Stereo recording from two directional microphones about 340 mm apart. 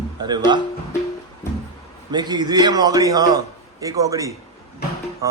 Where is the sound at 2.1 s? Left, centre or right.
Centre.